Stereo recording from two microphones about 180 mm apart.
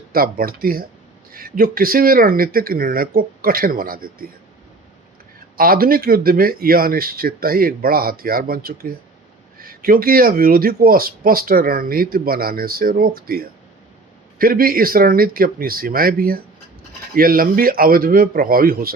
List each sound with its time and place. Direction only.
0.1 s speech: 55° right (ahead or behind)
5.5 s speech: 55° right (ahead or behind)